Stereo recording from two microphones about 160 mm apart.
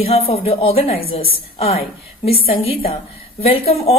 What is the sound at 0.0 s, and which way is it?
Speech, 35° left (ahead or behind).